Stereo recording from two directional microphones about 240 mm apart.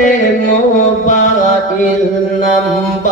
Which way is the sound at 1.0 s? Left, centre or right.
Left.